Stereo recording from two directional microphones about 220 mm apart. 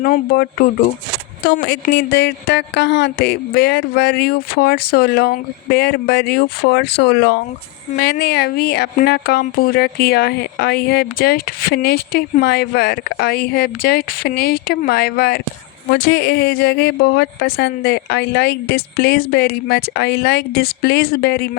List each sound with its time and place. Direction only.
0.0 s speech: 40° left (ahead or behind)
1.5 s a woman's voice: 50° left (ahead or behind)